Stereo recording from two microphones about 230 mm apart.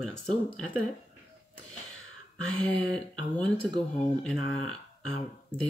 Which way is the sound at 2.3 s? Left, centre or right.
Centre.